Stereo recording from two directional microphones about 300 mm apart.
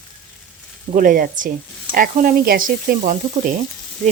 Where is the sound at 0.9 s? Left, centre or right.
Right.